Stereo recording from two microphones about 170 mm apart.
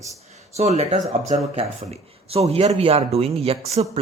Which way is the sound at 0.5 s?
40° right (ahead or behind).